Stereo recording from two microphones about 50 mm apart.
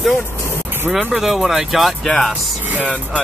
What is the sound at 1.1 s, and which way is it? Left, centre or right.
Speech, centre.